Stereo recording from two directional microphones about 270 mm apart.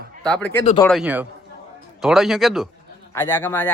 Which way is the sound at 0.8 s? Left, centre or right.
Centre.